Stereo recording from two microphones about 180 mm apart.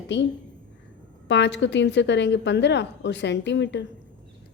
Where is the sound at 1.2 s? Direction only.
75° left (ahead or behind).